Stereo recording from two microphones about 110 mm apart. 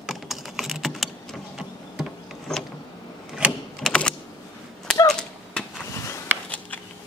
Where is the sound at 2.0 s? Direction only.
5° left (ahead or behind).